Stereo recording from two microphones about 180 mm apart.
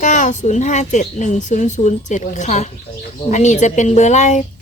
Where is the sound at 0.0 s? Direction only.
45° left (ahead or behind).